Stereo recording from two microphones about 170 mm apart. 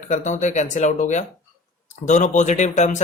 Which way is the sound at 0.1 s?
45° left (ahead or behind).